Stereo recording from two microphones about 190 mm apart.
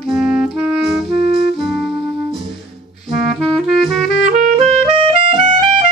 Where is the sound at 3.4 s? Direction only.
Centre (ahead or behind).